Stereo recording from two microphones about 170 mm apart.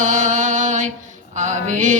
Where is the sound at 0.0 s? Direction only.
45° right (ahead or behind).